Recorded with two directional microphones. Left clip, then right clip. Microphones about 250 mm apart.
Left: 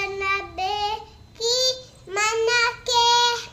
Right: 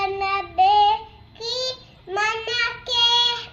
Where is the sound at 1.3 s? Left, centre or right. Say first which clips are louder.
Left 5 dB; centre.